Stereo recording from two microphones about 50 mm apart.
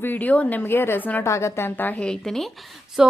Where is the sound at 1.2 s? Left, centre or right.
Left.